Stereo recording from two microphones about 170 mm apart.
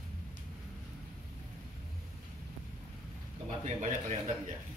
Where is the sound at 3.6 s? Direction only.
45° right (ahead or behind).